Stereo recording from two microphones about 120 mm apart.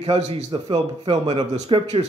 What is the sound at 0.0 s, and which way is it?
Speech, 50° right (ahead or behind).